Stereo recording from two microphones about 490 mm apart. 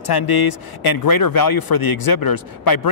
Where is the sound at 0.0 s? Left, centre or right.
Left.